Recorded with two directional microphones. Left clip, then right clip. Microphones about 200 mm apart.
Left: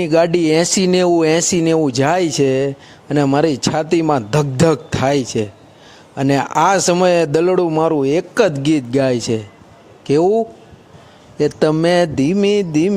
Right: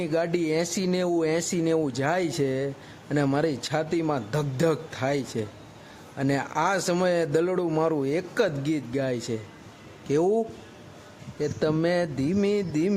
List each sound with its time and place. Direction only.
0.0 s speech: 35° left (ahead or behind)
10.1 s speech: 25° left (ahead or behind)
11.3 s speech: 35° left (ahead or behind)